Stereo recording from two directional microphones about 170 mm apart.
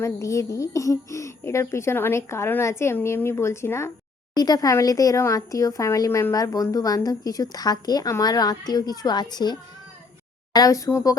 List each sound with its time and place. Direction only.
0.0 s speech: 20° left (ahead or behind)